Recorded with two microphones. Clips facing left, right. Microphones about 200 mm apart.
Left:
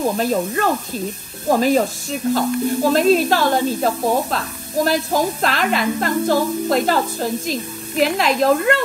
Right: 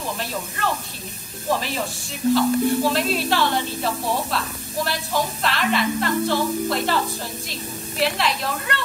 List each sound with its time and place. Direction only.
0.2 s speech: 45° left (ahead or behind)
8.0 s speech: 45° left (ahead or behind)